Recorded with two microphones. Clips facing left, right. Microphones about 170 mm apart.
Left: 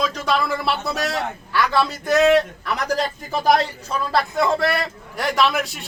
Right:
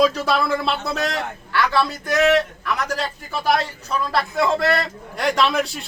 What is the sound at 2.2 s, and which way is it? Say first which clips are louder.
A man's voice: even; 35° left (ahead or behind).